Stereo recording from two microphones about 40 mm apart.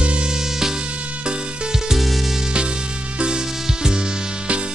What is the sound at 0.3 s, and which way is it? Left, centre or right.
Music, centre.